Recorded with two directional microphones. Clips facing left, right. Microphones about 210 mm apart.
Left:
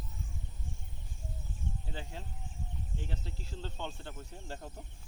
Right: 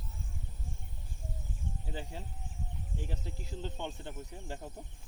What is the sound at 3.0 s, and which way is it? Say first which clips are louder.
Speech: right 3 dB; 10° right (ahead or behind).